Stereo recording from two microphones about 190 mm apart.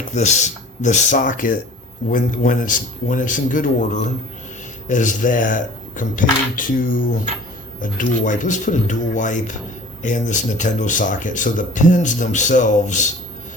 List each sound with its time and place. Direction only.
0.1 s speech: 35° left (ahead or behind)